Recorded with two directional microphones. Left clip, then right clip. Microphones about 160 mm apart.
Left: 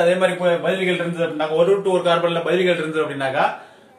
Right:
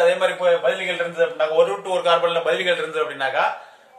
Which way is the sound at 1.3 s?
30° right (ahead or behind).